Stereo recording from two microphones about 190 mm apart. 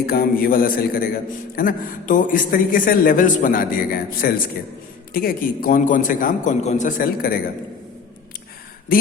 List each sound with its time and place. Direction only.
0.0 s a man's voice: 50° left (ahead or behind)
8.9 s a man's voice: 50° left (ahead or behind)